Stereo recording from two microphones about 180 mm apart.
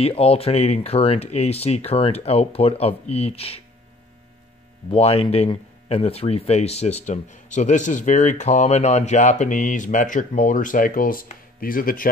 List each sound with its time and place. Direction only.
0.0 s speech: 35° left (ahead or behind)
4.9 s speech: 35° left (ahead or behind); by 12.1 s 50° left (ahead or behind)